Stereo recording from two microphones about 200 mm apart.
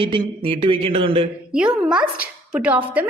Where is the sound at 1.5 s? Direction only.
5° right (ahead or behind).